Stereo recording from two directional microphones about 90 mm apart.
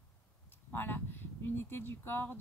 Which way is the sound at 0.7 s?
20° left (ahead or behind).